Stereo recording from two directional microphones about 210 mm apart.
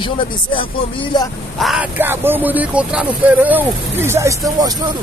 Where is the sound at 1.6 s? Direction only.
5° right (ahead or behind).